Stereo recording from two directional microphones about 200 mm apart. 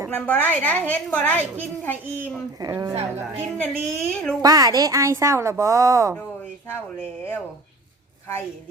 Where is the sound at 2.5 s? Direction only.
20° right (ahead or behind).